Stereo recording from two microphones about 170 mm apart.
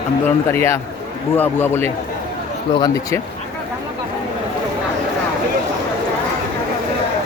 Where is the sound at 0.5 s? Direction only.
15° left (ahead or behind).